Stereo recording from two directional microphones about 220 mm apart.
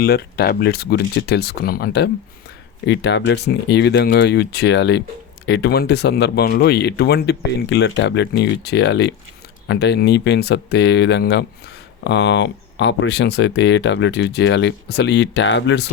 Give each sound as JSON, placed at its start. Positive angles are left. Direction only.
{"t": 0.0, "sound": "speech", "side_deg": 45}